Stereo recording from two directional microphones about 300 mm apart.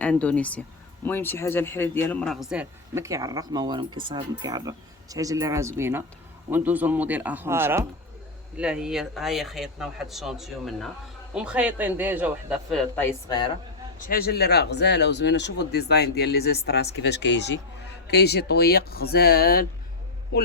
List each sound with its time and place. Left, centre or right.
0.0 s a man's voice: centre
13.0 s speech: centre
14.1 s speech: left